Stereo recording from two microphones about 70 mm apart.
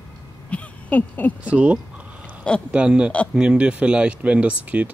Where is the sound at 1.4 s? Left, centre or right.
Centre.